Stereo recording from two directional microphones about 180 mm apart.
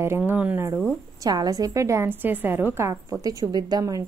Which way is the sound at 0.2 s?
10° right (ahead or behind).